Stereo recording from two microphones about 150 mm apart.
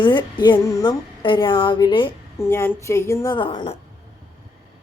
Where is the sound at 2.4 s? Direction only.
15° left (ahead or behind).